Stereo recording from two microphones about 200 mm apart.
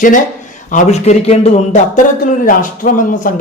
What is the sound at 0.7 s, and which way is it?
Speech, 35° left (ahead or behind).